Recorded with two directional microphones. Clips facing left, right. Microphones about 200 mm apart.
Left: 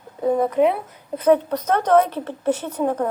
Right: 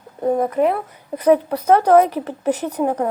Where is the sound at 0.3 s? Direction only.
10° right (ahead or behind).